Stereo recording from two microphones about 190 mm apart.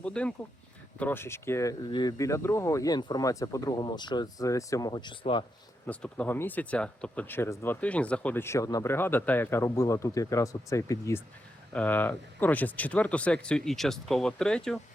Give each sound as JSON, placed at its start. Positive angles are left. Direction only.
{"t": 0.0, "sound": "speech", "side_deg": 5}
{"t": 5.8, "sound": "speech", "side_deg": 5}